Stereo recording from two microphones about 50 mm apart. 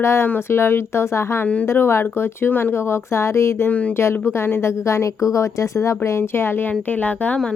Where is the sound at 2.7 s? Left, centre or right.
Left.